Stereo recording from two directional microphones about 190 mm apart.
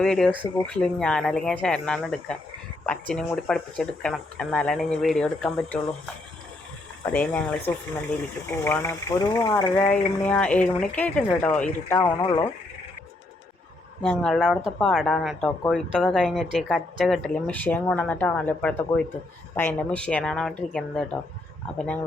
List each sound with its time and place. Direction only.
0.0 s speech: 5° left (ahead or behind)
7.0 s speech: 5° left (ahead or behind)
12.2 s speech: 20° left (ahead or behind)
14.0 s speech: 5° left (ahead or behind)